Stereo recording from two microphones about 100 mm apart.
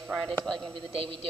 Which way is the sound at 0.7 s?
70° right (ahead or behind).